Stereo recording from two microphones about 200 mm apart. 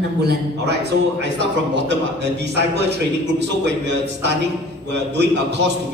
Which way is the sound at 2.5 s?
60° right (ahead or behind).